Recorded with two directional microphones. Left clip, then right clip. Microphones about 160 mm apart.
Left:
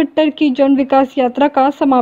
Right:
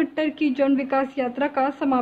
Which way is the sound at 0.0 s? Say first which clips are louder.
Left 10 dB; 40° left (ahead or behind).